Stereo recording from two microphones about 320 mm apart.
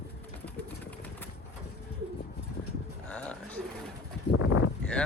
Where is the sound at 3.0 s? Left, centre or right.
Centre.